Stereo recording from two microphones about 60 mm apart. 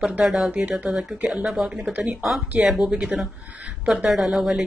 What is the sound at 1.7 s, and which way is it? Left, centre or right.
Speech, right.